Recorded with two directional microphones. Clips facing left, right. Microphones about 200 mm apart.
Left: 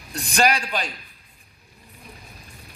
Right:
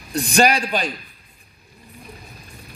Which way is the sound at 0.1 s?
25° right (ahead or behind).